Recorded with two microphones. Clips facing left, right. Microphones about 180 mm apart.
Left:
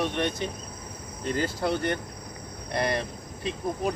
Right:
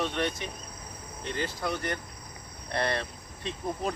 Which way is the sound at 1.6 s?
30° left (ahead or behind).